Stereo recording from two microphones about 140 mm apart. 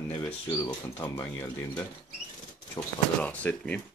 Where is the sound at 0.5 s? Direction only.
25° left (ahead or behind).